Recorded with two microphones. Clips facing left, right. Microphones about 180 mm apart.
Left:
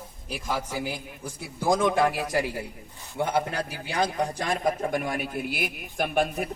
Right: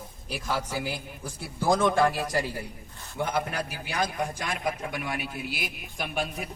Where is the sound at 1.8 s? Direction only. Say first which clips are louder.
Even; 15° left (ahead or behind).